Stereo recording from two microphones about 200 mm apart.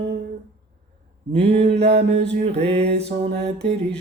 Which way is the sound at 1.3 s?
30° right (ahead or behind).